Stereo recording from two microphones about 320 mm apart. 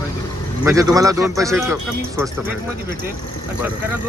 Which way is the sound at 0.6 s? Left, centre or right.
Centre.